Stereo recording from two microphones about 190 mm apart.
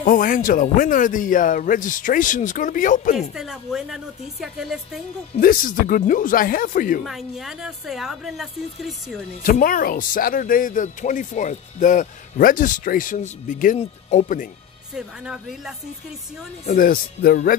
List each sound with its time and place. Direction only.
0.0 s speech: 45° left (ahead or behind)
3.2 s a woman's voice: centre (ahead or behind)
5.4 s speech: 45° left (ahead or behind)
7.1 s a woman's voice: centre (ahead or behind)
9.4 s speech: 50° left (ahead or behind)
15.0 s a woman's voice: 5° right (ahead or behind)
16.6 s speech: 45° left (ahead or behind)